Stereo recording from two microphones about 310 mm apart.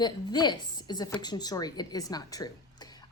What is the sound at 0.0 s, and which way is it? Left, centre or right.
A woman's voice, centre.